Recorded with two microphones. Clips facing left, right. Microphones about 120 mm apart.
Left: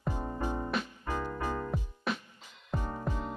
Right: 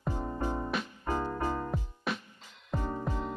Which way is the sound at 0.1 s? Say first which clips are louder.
Right 1 dB; 15° left (ahead or behind).